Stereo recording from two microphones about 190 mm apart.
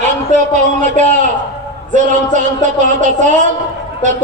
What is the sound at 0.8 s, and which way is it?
Speech, 40° right (ahead or behind).